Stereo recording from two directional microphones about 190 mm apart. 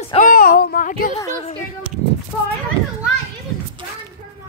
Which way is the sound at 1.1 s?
15° left (ahead or behind).